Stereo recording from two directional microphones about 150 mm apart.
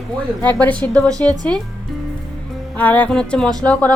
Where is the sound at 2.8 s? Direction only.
10° left (ahead or behind).